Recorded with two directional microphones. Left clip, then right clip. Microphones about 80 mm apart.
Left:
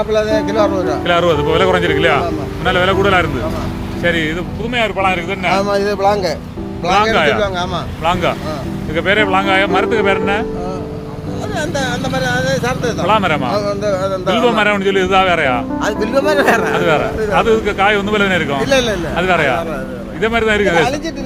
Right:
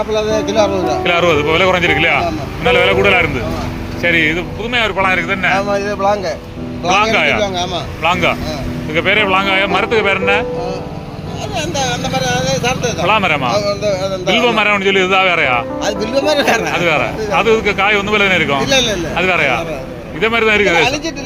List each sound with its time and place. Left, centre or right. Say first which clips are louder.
0.4 s speech: right 1 dB; left
4.7 s speech: right 2 dB; centre
5.0 s speech: right 2 dB; left
7.0 s speech: even; centre
7.3 s speech: even; left
11.5 s speech: right 1 dB; left
13.1 s speech: right 1 dB; left
13.5 s speech: right 1 dB; left
14.3 s speech: right 1 dB; left
15.8 s speech: even; left
16.3 s speech: left 1 dB; left
16.7 s speech: even; left